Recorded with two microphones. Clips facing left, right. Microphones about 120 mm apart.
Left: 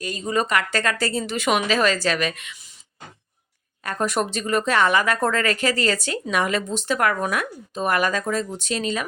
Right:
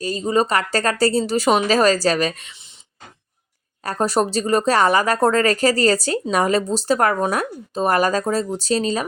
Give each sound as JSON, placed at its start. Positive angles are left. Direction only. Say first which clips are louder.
{"t": 0.0, "sound": "speech", "louder": "right 5 dB", "side_deg": -35}
{"t": 3.8, "sound": "speech", "louder": "right 4 dB", "side_deg": -35}